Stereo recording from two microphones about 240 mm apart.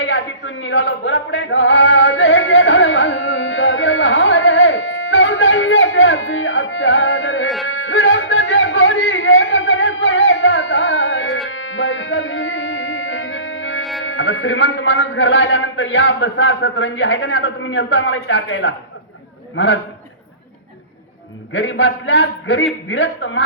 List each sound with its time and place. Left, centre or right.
0.0 s a sound: left
7.7 s music: left
14.0 s a man's voice: left
21.5 s a man's voice: left